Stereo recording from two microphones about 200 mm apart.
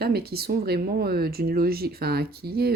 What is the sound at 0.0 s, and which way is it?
Speech, 50° right (ahead or behind).